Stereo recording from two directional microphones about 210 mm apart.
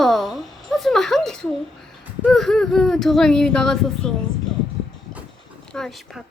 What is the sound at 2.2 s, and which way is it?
Speech, centre (ahead or behind).